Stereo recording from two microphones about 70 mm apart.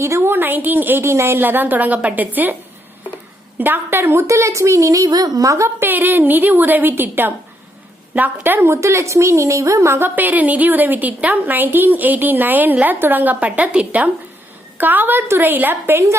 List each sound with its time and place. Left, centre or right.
0.0 s a woman's voice: right
3.6 s speech: right
5.8 s a woman's voice: right
10.2 s a woman's voice: right